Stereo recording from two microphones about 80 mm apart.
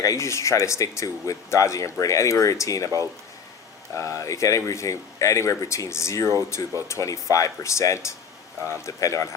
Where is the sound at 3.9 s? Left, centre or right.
Left.